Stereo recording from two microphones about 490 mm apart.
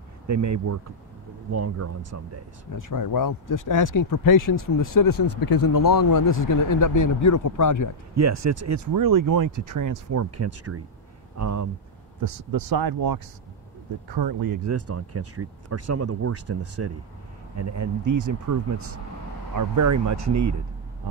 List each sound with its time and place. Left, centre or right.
0.3 s speech: right
2.7 s speech: left
8.2 s speech: right
14.7 s speech: right